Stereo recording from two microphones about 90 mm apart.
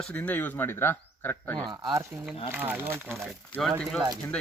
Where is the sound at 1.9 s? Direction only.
35° right (ahead or behind).